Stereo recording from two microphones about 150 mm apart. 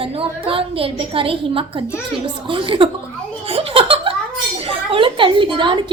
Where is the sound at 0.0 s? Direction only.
35° right (ahead or behind).